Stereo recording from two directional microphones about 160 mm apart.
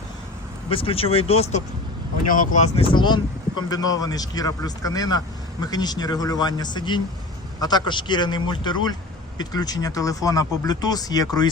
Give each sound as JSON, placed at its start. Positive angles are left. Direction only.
{"t": 0.7, "sound": "speech", "side_deg": 35}
{"t": 2.2, "sound": "speech", "side_deg": 60}
{"t": 2.7, "sound": "speech", "side_deg": 30}